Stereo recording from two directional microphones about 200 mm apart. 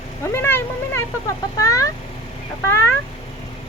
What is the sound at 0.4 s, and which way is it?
Speech, 10° left (ahead or behind).